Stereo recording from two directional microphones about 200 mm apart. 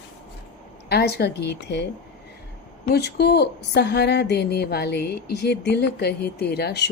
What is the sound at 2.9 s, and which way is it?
Speech, 55° left (ahead or behind).